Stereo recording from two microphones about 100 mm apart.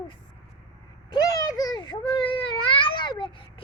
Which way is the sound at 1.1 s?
40° left (ahead or behind).